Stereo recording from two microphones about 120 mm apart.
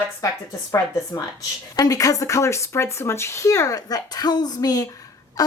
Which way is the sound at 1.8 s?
30° left (ahead or behind).